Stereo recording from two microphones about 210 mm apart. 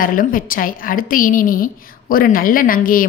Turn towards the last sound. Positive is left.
turn(degrees=40)  # may be behind; listen again after turning